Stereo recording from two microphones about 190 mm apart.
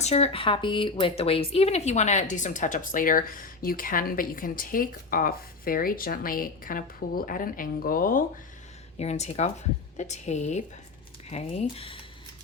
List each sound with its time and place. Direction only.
0.0 s speech: 35° left (ahead or behind)
9.0 s speech: 35° left (ahead or behind)